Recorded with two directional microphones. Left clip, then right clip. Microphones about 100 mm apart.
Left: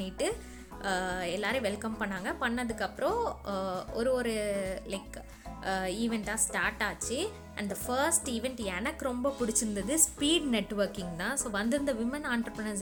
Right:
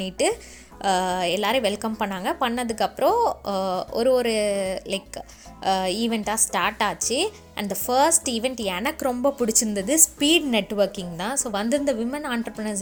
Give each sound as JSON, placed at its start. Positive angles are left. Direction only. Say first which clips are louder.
{"t": 0.0, "sound": "a woman's voice", "louder": "right 10 dB", "side_deg": -40}